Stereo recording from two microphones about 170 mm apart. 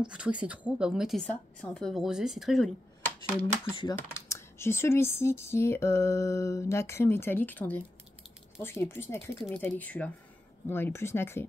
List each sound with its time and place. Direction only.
0.1 s a woman's voice: 5° right (ahead or behind); by 11.4 s 15° left (ahead or behind)